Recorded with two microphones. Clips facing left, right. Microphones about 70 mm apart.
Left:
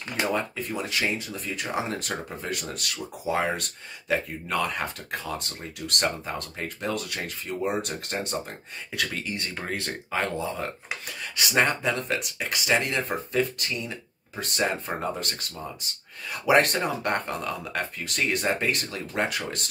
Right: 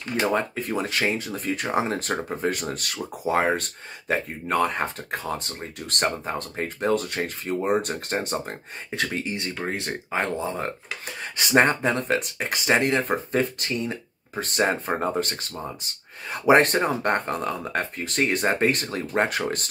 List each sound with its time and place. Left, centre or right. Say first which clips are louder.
0.3 s speech: right 3 dB; right